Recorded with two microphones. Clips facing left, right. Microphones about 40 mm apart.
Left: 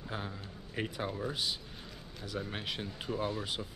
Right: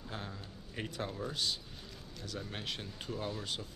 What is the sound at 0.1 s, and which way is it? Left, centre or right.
Speech, centre.